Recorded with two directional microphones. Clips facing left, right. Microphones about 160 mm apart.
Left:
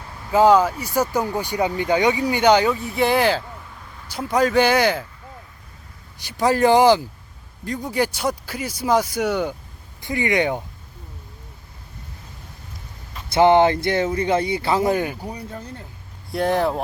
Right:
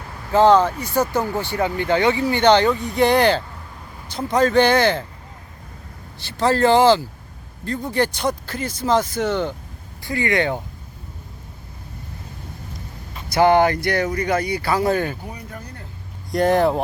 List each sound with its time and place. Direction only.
0.3 s speech: 10° left (ahead or behind)
6.1 s speech: 15° left (ahead or behind)
13.2 s speech: 25° left (ahead or behind)
15.3 s speech: 30° left (ahead or behind)
16.3 s speech: centre (ahead or behind)